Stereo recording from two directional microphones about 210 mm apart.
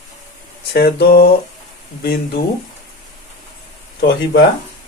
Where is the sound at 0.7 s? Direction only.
50° left (ahead or behind).